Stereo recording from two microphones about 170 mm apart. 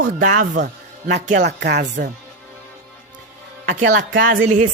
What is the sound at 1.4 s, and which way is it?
Speech, 80° right.